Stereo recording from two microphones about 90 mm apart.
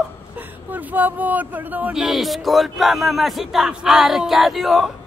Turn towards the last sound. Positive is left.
turn(degrees=0)  # may be behind; listen again after turning